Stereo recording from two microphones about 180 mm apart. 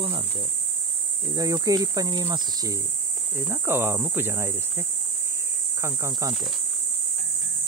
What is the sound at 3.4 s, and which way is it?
Cricket, 15° right (ahead or behind).